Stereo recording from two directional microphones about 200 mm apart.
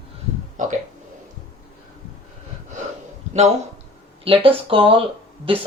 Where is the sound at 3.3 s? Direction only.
35° right (ahead or behind).